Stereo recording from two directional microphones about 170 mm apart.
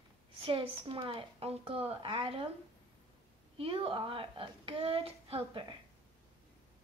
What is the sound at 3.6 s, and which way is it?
Speech, 30° right (ahead or behind).